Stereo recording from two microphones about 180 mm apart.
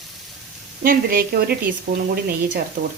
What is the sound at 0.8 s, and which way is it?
Speech, 55° right (ahead or behind).